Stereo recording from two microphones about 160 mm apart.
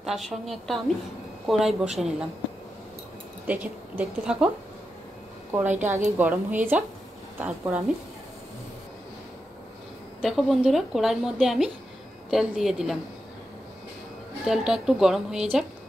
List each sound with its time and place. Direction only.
0.0 s a woman's voice: centre (ahead or behind)
3.4 s a woman's voice: 10° right (ahead or behind)
5.7 s a woman's voice: 50° right (ahead or behind)
6.1 s a woman's voice: 10° right (ahead or behind)
10.2 s a woman's voice: centre (ahead or behind)
14.4 s a woman's voice: 5° right (ahead or behind)